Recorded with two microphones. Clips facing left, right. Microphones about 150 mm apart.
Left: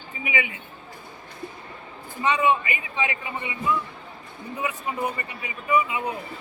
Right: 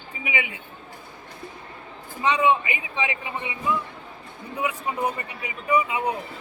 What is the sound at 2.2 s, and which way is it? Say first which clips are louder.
A man's voice: right 1 dB; 15° right (ahead or behind).